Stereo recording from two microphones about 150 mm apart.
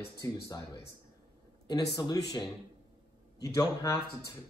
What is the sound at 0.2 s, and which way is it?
Speech, 20° left (ahead or behind).